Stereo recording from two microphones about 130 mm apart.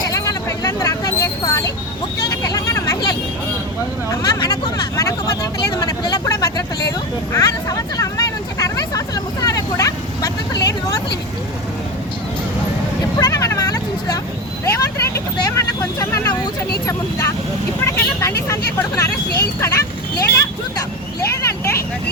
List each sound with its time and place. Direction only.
0.0 s a sound: 30° left (ahead or behind)
2.2 s vehicle: 30° left (ahead or behind)
13.1 s vehicle: 25° left (ahead or behind)
17.8 s vehicle: 20° left (ahead or behind)